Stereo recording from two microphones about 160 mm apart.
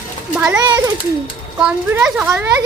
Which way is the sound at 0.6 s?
25° right (ahead or behind).